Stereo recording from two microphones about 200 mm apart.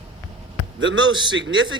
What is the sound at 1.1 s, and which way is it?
Speech, 25° right (ahead or behind).